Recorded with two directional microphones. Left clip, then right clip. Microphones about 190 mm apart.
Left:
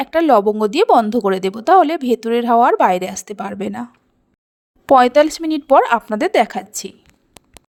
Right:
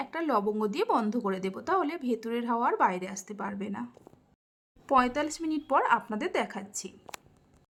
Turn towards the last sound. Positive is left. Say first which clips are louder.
# left 13 dB
turn(degrees=40)  # may be behind; listen again after turning